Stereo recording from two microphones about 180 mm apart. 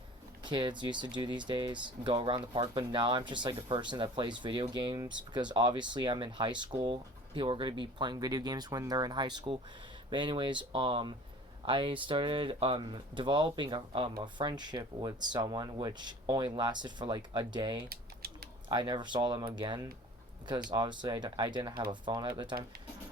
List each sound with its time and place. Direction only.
0.4 s speech: 25° right (ahead or behind)
17.8 s typing: 60° right (ahead or behind)
18.7 s speech: 25° right (ahead or behind)